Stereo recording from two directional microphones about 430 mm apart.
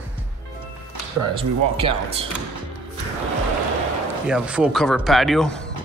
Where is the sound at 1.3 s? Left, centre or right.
Centre.